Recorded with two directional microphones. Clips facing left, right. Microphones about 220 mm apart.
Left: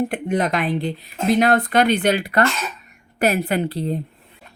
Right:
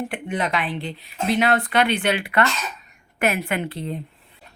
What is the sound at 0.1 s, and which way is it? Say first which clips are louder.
Speech: left 4 dB; 40° left (ahead or behind).